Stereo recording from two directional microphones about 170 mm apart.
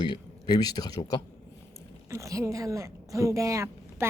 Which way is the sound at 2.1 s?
20° right (ahead or behind).